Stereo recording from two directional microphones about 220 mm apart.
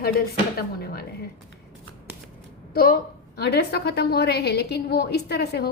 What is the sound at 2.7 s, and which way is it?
A woman's voice, 45° left (ahead or behind).